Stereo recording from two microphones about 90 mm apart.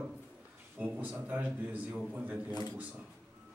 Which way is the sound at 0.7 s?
15° right (ahead or behind).